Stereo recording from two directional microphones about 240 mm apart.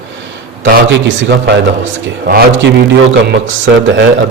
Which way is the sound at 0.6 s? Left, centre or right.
Right.